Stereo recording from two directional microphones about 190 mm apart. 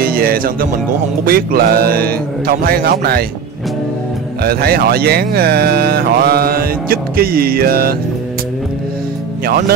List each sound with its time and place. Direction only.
0.0 s speech: 50° right (ahead or behind)
4.4 s speech: 55° right (ahead or behind)